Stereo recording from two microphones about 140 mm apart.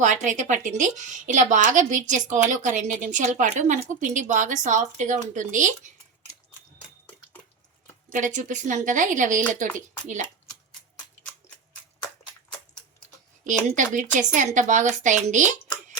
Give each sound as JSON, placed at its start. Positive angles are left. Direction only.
{"t": 0.0, "sound": "a woman's voice", "side_deg": -60}
{"t": 8.1, "sound": "a woman's voice", "side_deg": -65}
{"t": 13.4, "sound": "a woman's voice", "side_deg": -65}